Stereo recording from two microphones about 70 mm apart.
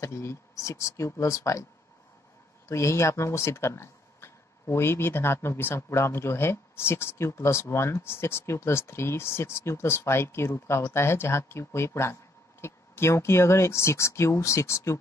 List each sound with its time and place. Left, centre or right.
0.0 s speech: left
2.7 s speech: left